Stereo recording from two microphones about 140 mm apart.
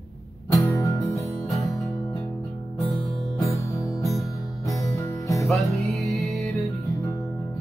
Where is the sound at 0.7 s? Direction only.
25° left (ahead or behind).